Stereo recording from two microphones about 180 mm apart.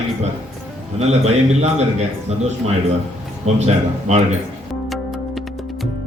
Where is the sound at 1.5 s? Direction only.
40° right (ahead or behind).